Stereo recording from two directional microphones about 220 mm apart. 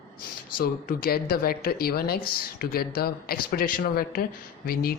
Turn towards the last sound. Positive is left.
turn(degrees=45)  # may be behind; listen again after turning